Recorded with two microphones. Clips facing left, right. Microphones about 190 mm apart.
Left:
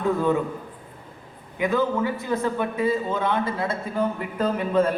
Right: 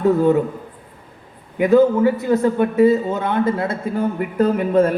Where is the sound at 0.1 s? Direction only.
40° right (ahead or behind).